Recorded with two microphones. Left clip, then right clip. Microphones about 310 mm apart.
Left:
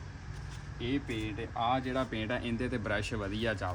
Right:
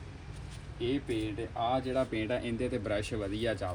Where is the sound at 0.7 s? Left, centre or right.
Centre.